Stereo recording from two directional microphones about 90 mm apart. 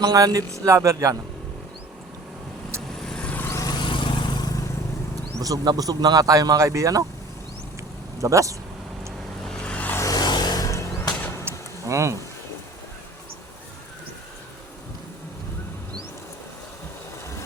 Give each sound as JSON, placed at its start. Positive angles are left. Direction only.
{"t": 0.0, "sound": "speech", "side_deg": -45}
{"t": 3.1, "sound": "vehicle", "side_deg": 10}
{"t": 3.5, "sound": "vehicle", "side_deg": 40}
{"t": 3.8, "sound": "vehicle", "side_deg": 65}
{"t": 5.4, "sound": "speech", "side_deg": -45}
{"t": 8.2, "sound": "speech", "side_deg": -35}
{"t": 9.4, "sound": "vehicle", "side_deg": 10}
{"t": 10.0, "sound": "vehicle", "side_deg": 45}
{"t": 11.4, "sound": "a sound", "side_deg": -35}